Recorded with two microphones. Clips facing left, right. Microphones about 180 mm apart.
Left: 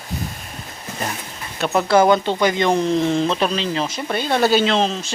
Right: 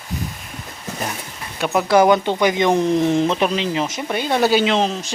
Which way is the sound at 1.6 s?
10° right (ahead or behind).